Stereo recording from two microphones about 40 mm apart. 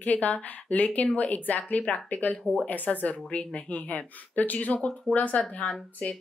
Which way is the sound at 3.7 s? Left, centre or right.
Left.